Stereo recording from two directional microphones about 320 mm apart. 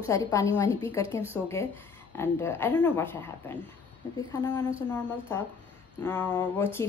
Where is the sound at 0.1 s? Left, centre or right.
Centre.